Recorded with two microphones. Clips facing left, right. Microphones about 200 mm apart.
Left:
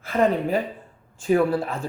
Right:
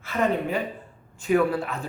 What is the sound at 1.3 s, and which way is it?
Speech, 30° left (ahead or behind).